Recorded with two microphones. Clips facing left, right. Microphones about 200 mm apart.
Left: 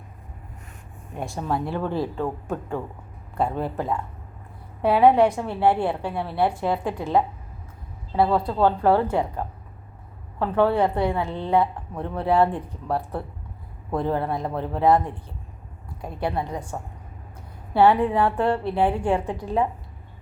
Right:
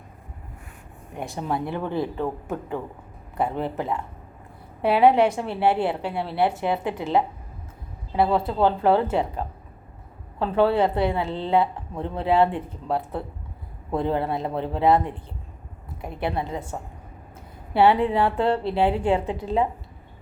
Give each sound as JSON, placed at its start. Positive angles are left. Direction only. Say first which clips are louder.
{"t": 1.3, "sound": "a woman's voice", "louder": "left 1 dB", "side_deg": -20}
{"t": 10.4, "sound": "a woman's voice", "louder": "even", "side_deg": -25}